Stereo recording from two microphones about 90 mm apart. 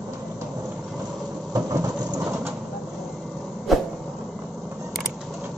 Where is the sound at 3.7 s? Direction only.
Centre (ahead or behind).